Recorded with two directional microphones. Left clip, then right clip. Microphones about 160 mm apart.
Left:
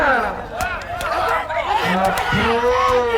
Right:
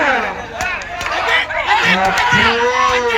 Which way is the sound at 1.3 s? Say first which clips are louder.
Right 5 dB; 25° right (ahead or behind).